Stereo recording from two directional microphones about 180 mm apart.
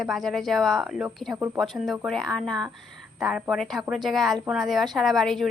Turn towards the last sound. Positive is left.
turn(degrees=0)  # may be behind; listen again after turning